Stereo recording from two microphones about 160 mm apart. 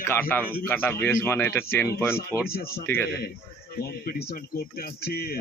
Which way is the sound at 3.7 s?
75° left (ahead or behind).